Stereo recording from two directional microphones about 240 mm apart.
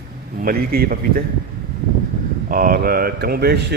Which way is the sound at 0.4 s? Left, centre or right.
Right.